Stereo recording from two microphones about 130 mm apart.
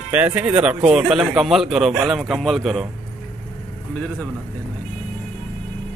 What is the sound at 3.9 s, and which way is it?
Speech, 10° left (ahead or behind).